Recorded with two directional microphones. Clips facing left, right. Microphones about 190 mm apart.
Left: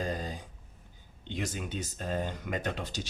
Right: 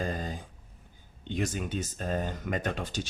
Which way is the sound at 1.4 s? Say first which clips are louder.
Right 4 dB; 50° right (ahead or behind).